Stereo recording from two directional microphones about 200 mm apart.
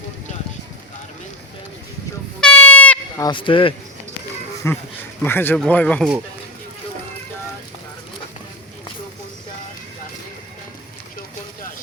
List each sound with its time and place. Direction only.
2.4 s goat: 5° left (ahead or behind)
3.2 s speech: 25° left (ahead or behind)
4.7 s speech: 15° left (ahead or behind)